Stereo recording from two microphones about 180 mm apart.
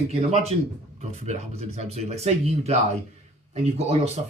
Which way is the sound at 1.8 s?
35° right (ahead or behind).